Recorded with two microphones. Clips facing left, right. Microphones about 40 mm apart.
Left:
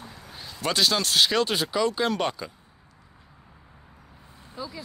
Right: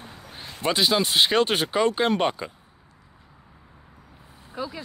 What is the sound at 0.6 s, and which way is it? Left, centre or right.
Speech, centre.